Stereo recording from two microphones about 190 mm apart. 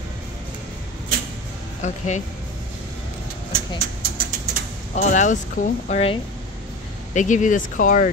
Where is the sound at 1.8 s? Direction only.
40° left (ahead or behind).